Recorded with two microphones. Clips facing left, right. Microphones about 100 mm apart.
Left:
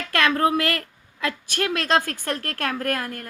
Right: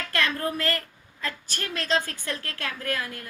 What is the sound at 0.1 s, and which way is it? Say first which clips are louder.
A woman's voice: left 8 dB; 70° left (ahead or behind).